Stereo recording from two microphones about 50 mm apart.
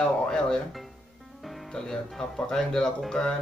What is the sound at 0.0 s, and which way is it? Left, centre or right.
Speech, centre.